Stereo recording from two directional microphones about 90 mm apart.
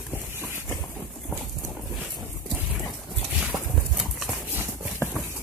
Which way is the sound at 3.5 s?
Centre (ahead or behind).